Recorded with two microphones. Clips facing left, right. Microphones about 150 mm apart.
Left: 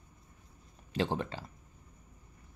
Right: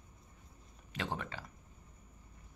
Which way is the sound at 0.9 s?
30° left (ahead or behind).